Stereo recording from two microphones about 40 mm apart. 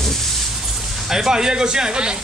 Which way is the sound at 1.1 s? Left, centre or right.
Centre.